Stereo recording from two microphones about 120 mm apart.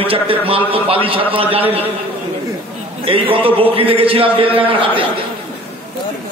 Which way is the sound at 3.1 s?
50° right (ahead or behind).